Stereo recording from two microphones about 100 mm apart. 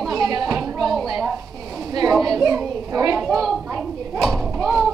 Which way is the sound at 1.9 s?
40° right (ahead or behind).